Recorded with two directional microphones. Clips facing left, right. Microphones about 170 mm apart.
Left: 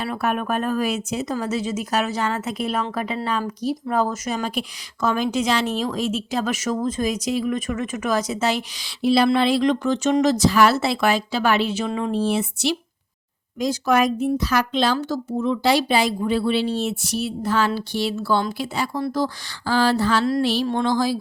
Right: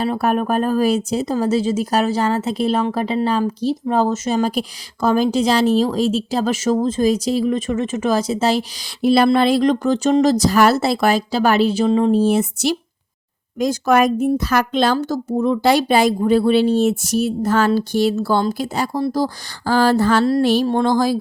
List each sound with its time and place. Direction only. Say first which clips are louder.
0.0 s speech: right 6 dB; 35° right (ahead or behind)
9.0 s speech: right 4 dB; 50° right (ahead or behind)